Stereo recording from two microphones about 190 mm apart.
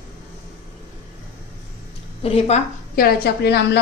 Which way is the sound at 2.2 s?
30° left (ahead or behind).